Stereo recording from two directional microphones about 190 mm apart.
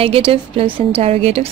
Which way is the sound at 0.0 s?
30° right (ahead or behind).